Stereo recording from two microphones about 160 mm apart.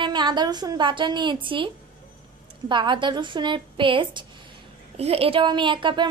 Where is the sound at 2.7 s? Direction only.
30° right (ahead or behind).